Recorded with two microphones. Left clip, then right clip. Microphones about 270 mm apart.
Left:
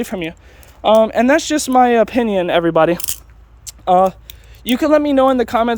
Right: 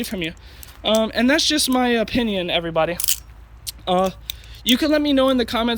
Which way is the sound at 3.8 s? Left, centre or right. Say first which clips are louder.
Left 7 dB; centre.